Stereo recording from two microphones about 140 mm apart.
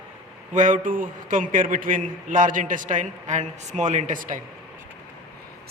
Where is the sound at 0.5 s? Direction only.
65° right (ahead or behind).